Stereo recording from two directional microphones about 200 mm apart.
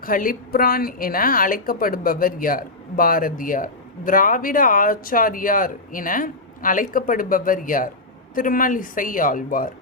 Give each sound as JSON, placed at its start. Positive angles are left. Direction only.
{"t": 0.0, "sound": "a woman's voice", "side_deg": 45}